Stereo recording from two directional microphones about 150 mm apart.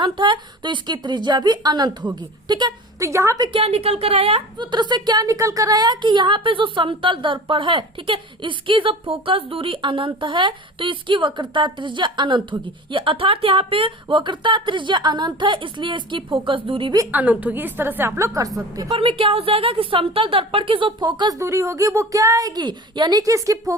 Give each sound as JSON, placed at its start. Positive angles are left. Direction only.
{"t": 0.0, "sound": "a woman's voice", "side_deg": -30}
{"t": 3.6, "sound": "a woman's voice", "side_deg": -40}
{"t": 17.0, "sound": "a woman's voice", "side_deg": -10}
{"t": 18.9, "sound": "a woman's voice", "side_deg": -40}